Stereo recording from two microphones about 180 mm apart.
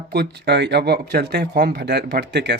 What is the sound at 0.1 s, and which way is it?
Speech, 65° right (ahead or behind).